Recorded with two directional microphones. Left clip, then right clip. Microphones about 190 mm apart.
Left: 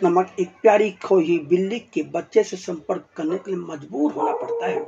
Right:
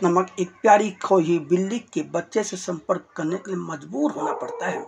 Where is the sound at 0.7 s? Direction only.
35° right (ahead or behind).